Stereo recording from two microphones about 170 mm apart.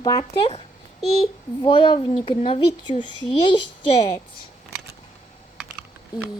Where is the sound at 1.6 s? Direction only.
30° left (ahead or behind).